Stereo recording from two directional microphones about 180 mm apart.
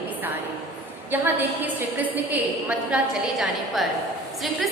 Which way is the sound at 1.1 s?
10° right (ahead or behind).